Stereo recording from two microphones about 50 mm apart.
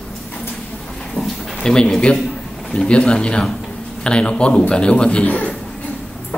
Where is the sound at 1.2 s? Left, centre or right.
Left.